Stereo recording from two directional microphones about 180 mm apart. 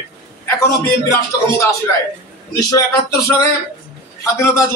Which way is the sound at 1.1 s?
15° left (ahead or behind).